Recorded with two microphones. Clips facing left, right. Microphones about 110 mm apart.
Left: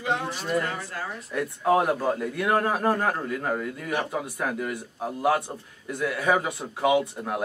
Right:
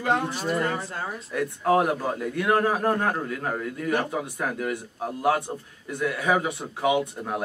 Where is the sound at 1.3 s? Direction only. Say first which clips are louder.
Even; centre (ahead or behind).